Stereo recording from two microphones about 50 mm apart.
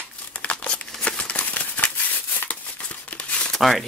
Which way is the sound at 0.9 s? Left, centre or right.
Left.